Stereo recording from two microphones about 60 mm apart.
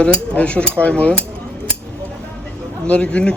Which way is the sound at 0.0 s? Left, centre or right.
Left.